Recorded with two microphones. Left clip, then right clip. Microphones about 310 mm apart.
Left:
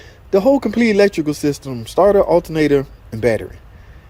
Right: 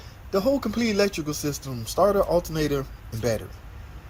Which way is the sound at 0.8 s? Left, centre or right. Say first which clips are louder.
Left 11 dB; centre.